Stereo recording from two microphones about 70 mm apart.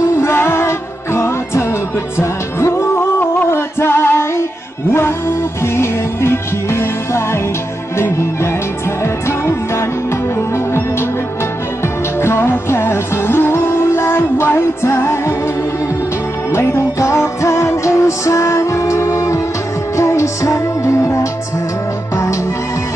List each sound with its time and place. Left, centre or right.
0.2 s music: left
12.2 s music: left
16.5 s music: left